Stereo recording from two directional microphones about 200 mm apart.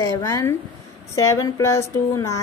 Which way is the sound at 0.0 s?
15° left (ahead or behind).